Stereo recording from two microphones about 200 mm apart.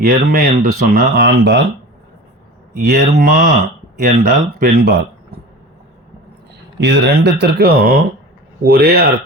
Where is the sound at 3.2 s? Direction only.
45° right (ahead or behind).